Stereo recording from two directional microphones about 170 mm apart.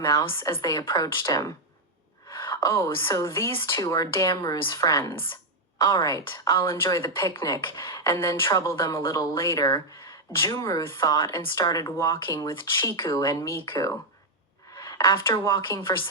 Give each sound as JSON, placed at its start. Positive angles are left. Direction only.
{"t": 0.0, "sound": "a woman's voice", "side_deg": 20}